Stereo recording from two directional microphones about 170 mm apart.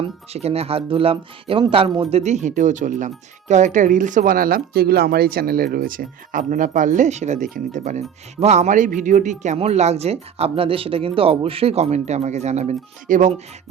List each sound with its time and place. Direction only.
0.0 s speech: 35° right (ahead or behind)